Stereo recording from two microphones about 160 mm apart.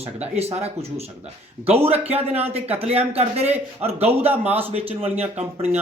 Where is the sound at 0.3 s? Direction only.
40° right (ahead or behind).